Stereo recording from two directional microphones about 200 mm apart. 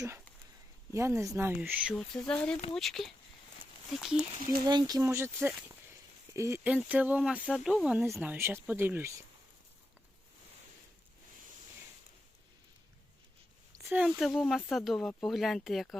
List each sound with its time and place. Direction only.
0.9 s speech: 15° right (ahead or behind)
4.6 s speech: 20° right (ahead or behind)
13.8 s speech: centre (ahead or behind)